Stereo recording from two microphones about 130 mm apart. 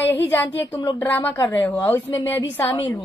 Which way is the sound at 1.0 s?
15° left (ahead or behind).